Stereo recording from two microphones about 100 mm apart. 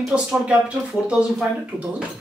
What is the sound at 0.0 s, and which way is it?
Speech, 5° right (ahead or behind).